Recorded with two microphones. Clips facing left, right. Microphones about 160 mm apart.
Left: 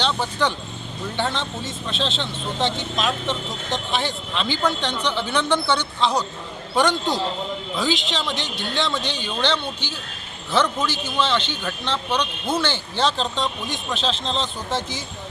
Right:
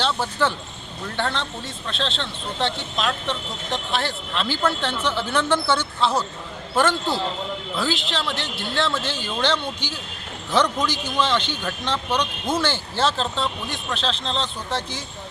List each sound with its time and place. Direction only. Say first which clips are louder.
0.0 s a woman's voice: even; 5° right (ahead or behind)